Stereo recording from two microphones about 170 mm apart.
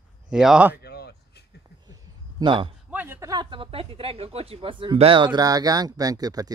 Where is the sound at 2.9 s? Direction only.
10° right (ahead or behind).